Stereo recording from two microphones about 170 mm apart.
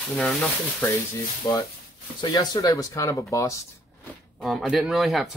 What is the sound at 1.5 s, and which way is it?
Speech, 20° left (ahead or behind).